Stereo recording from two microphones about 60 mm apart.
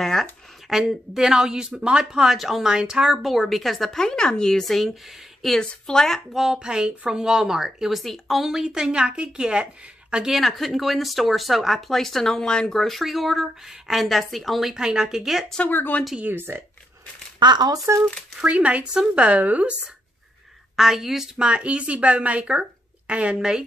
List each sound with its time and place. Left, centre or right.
0.0 s a sound: centre
0.7 s a woman's voice: centre
3.2 s speech: centre
6.3 s a woman's voice: centre
14.7 s a woman's voice: centre
15.7 s speech: left
16.3 s speech: right
17.9 s speech: right
18.4 s speech: right
20.7 s speech: centre
21.4 s speech: centre